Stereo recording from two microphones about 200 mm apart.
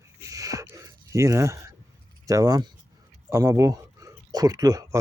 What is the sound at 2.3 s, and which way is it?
Speech, 15° right (ahead or behind).